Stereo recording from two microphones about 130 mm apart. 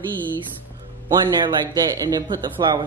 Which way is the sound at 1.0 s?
30° right (ahead or behind).